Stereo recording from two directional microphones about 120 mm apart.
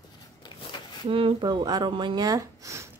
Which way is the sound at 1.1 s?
45° right (ahead or behind).